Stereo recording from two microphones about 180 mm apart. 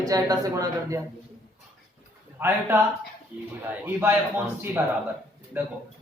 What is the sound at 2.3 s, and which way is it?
Speech, 10° right (ahead or behind).